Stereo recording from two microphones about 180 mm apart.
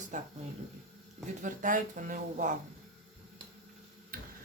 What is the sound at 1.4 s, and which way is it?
Speech, 45° right (ahead or behind).